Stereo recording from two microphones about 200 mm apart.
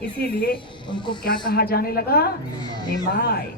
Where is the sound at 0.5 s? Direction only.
25° left (ahead or behind).